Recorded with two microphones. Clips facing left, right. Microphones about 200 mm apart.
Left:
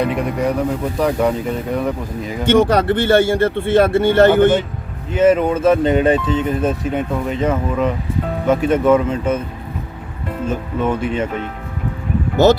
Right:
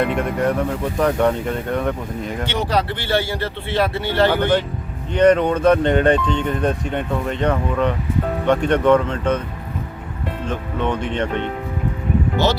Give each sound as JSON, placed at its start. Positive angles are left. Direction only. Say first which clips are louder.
{"t": 0.0, "sound": "speech", "louder": "left 1 dB", "side_deg": 0}
{"t": 2.5, "sound": "speech", "louder": "left 10 dB", "side_deg": 50}
{"t": 5.1, "sound": "speech", "louder": "left 1 dB", "side_deg": 5}
{"t": 10.4, "sound": "speech", "louder": "left 4 dB", "side_deg": 5}